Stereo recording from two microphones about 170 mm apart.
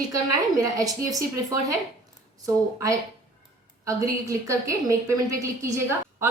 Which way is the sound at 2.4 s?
20° right (ahead or behind).